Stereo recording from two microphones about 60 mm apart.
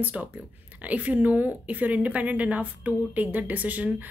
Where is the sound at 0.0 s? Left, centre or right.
Right.